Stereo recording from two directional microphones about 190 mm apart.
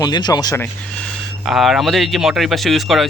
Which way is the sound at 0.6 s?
5° left (ahead or behind).